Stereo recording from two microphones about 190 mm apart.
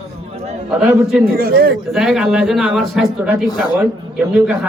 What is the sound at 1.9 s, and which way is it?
A man's voice, 5° right (ahead or behind).